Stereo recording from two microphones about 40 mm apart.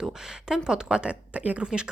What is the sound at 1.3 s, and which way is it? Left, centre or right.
Speech, right.